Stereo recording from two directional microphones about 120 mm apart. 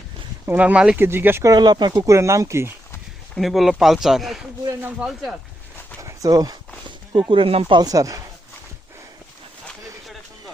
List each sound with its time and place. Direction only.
0.4 s speech: 15° right (ahead or behind)
1.5 s speech: 35° right (ahead or behind)
3.3 s speech: centre (ahead or behind)
6.0 s a sound: 30° right (ahead or behind)
7.2 s speech: 45° right (ahead or behind)
7.8 s speech: 30° right (ahead or behind)